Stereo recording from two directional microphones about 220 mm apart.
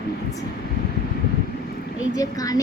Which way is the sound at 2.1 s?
15° left (ahead or behind).